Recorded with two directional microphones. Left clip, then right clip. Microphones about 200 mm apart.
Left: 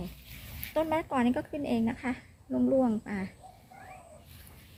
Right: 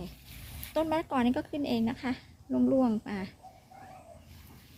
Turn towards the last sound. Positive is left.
turn(degrees=-10)  # may be behind; listen again after turning